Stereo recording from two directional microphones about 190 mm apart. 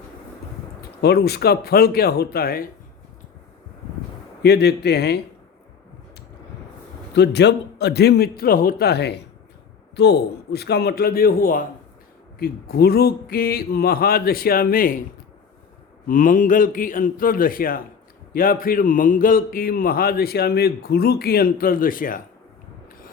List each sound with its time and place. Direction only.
1.0 s a man's voice: 60° left (ahead or behind)
4.4 s a man's voice: 60° left (ahead or behind)
7.1 s a man's voice: 60° left (ahead or behind)
16.0 s a man's voice: 45° left (ahead or behind)